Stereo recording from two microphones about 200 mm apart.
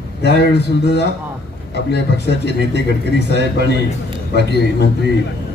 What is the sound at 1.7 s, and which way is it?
A man's voice, 55° left (ahead or behind).